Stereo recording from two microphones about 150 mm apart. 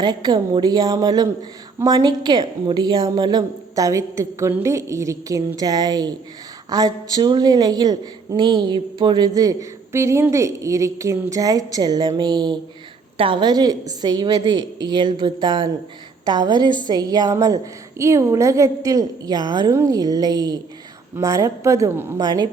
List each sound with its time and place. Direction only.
0.0 s a woman's voice: 30° right (ahead or behind)